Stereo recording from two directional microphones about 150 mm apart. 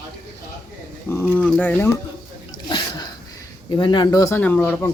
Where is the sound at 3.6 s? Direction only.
30° left (ahead or behind); by 4.9 s 10° left (ahead or behind).